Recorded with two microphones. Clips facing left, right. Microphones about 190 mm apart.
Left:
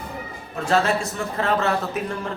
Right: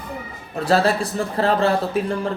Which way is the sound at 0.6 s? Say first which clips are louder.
Right 3 dB; 35° right (ahead or behind).